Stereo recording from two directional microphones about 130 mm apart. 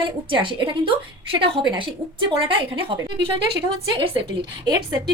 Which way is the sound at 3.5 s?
40° right (ahead or behind).